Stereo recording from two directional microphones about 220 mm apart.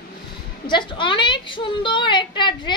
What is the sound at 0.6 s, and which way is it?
A woman's voice, 20° left (ahead or behind).